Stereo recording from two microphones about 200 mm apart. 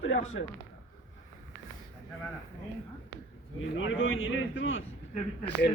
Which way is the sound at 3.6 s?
75° left (ahead or behind).